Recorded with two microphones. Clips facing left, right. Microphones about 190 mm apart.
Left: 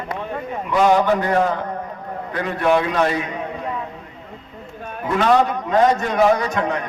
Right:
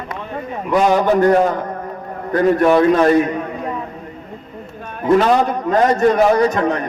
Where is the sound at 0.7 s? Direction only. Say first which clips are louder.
Right 2 dB; 45° right (ahead or behind).